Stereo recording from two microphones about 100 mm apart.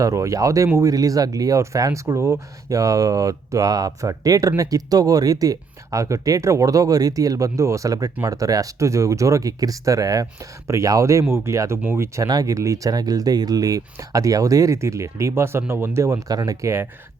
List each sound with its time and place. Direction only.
0.0 s speech: 30° right (ahead or behind)